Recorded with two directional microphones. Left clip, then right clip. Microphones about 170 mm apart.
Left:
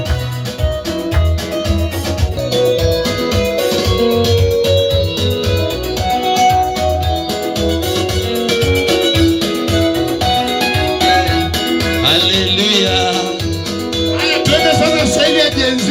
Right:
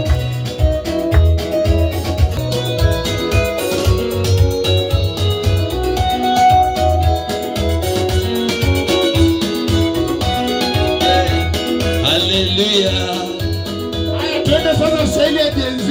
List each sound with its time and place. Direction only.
6.3 s music: 15° left (ahead or behind)
7.9 s music: 20° left (ahead or behind); by 13.1 s 5° right (ahead or behind)
14.2 s music: 5° right (ahead or behind)